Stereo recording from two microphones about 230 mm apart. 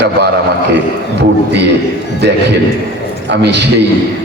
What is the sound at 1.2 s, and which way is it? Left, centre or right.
Speech, right.